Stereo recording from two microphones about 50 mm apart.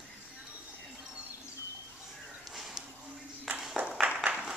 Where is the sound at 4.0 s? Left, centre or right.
Right.